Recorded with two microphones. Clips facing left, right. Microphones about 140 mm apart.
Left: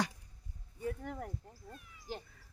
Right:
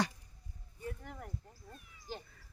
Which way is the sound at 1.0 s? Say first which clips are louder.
Left 6 dB; 50° left (ahead or behind).